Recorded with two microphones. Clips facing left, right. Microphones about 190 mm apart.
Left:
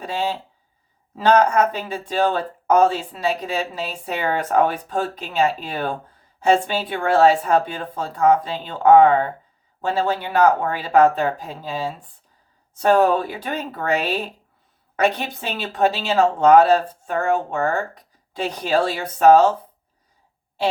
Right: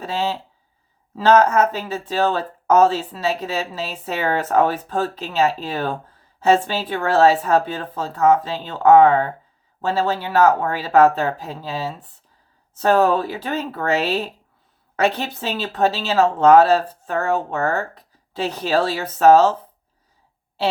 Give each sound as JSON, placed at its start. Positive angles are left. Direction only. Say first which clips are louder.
{"t": 0.0, "sound": "speech", "louder": "right 1 dB", "side_deg": 15}
{"t": 6.9, "sound": "speech", "louder": "even", "side_deg": 15}